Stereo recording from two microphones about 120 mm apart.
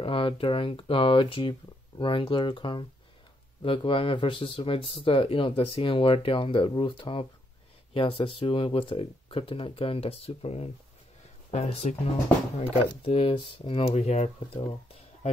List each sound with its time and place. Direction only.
0.0 s speech: 50° left (ahead or behind)
12.5 s speech: 50° left (ahead or behind)
13.9 s speech: 65° left (ahead or behind)